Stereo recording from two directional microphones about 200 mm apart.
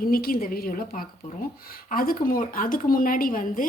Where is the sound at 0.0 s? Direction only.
45° left (ahead or behind).